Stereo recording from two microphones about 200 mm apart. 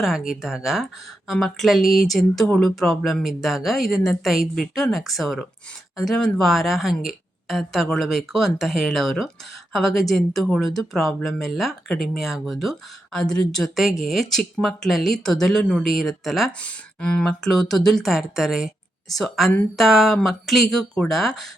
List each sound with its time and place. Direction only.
0.0 s speech: centre (ahead or behind)